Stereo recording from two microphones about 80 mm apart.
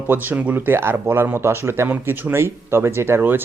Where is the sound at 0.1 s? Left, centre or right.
Right.